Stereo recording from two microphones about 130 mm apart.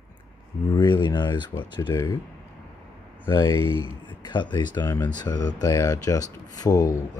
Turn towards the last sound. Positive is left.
turn(degrees=30)  # may be behind; listen again after turning